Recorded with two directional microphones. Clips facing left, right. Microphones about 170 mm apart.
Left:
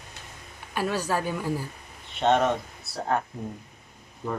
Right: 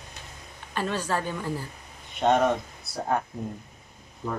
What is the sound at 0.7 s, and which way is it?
Speech, 10° left (ahead or behind).